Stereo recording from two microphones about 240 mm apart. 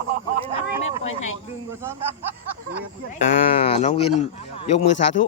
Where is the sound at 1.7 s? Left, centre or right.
Centre.